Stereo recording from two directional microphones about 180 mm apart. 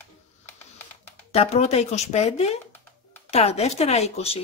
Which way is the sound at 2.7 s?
10° left (ahead or behind).